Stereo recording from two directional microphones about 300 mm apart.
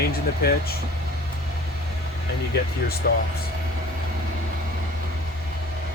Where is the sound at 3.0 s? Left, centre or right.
Left.